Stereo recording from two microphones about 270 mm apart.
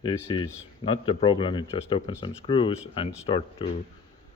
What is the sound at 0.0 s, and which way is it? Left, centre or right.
Speech, centre.